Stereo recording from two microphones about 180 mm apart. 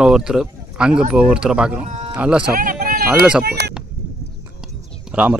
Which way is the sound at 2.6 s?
55° right (ahead or behind).